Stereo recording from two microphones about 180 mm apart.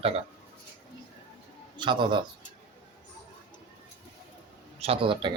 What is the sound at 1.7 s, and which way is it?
Speech, 25° right (ahead or behind).